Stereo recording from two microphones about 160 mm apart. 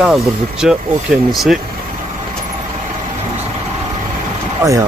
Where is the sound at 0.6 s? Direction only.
5° right (ahead or behind).